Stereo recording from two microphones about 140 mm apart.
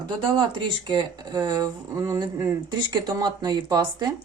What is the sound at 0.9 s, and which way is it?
Speech, 30° right (ahead or behind).